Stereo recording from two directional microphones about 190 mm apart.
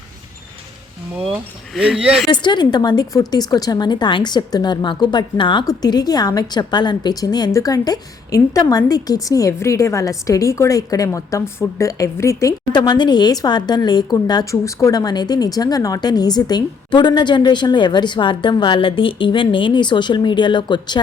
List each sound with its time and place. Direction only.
1.2 s speech: centre (ahead or behind)
2.3 s a woman's voice: 25° left (ahead or behind)